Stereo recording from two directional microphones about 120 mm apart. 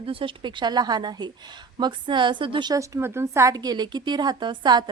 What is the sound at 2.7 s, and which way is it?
A woman's voice, 25° right (ahead or behind).